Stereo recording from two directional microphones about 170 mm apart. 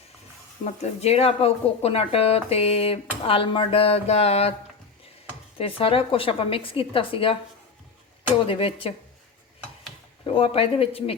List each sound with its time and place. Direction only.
0.6 s speech: 40° left (ahead or behind)
5.5 s speech: 35° left (ahead or behind)
8.4 s speech: 35° left (ahead or behind)
10.2 s speech: 35° left (ahead or behind)